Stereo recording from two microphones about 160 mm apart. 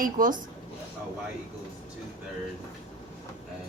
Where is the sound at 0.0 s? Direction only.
60° right (ahead or behind).